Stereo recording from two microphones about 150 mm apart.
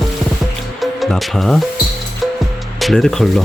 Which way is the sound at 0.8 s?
Centre (ahead or behind).